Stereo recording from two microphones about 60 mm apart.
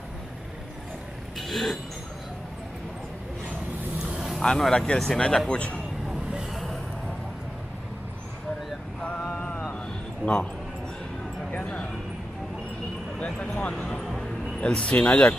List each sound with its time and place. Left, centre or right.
1.4 s speech: centre
4.0 s vehicle: centre
4.4 s speech: centre
5.5 s speech: left
6.0 s vehicle: centre
9.2 s mantra: centre
10.2 s speech: left
11.5 s a sound: centre
13.2 s speech: centre